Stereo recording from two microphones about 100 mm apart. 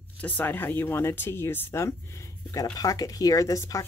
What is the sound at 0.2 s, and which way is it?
Speech, 15° left (ahead or behind).